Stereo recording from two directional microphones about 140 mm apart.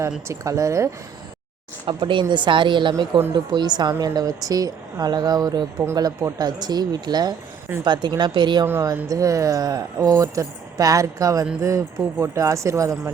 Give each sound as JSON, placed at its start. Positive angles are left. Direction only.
{"t": 0.3, "sound": "a woman's voice", "side_deg": -25}
{"t": 1.9, "sound": "a woman's voice", "side_deg": -35}
{"t": 7.7, "sound": "speech", "side_deg": -15}
{"t": 8.2, "sound": "speech", "side_deg": -35}
{"t": 8.6, "sound": "a woman's voice", "side_deg": -20}